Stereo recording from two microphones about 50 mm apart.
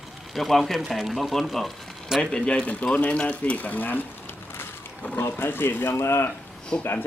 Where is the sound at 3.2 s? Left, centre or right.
Left.